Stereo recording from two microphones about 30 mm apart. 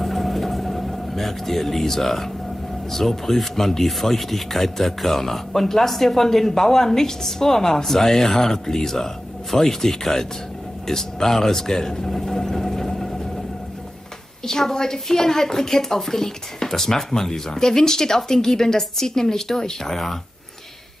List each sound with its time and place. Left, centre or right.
0.0 s vehicle: centre
2.9 s speech: centre
11.7 s vehicle: centre
14.4 s speech: centre